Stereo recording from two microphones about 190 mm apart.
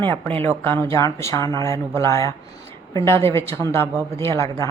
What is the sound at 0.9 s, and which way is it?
Speech, 15° left (ahead or behind).